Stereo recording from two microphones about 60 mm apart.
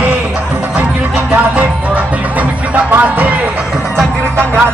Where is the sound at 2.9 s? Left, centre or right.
Right.